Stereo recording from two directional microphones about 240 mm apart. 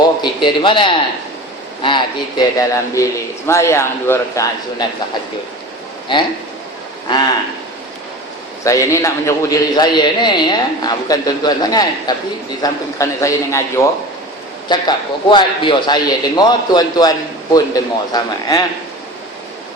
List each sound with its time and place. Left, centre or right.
0.2 s a man's voice: centre
7.1 s a man's voice: centre
8.6 s a man's voice: centre